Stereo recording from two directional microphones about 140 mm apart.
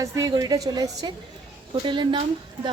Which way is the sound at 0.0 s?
25° right (ahead or behind).